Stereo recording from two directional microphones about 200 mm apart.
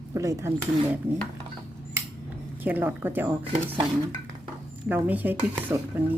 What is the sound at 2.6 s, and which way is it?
Speech, 10° right (ahead or behind).